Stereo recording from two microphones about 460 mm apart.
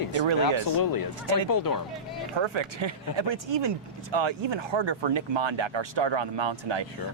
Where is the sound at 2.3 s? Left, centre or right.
Right.